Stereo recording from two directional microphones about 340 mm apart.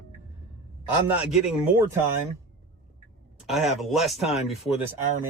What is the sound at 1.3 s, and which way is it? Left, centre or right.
Speech, centre.